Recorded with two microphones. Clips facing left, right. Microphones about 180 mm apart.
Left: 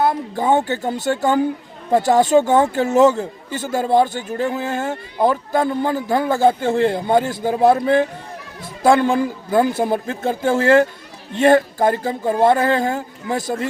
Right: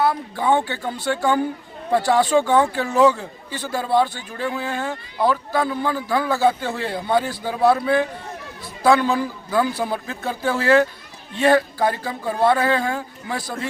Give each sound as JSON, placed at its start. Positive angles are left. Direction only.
{"t": 0.3, "sound": "speech", "side_deg": 45}